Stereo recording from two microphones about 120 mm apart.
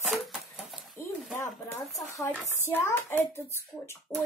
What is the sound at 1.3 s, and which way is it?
Speech, 25° left (ahead or behind).